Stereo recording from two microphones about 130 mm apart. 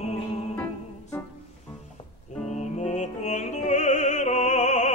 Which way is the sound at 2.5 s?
65° left (ahead or behind).